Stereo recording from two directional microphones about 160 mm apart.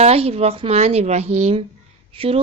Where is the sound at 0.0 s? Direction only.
40° right (ahead or behind).